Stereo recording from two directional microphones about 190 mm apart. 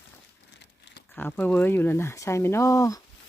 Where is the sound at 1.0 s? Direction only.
10° left (ahead or behind).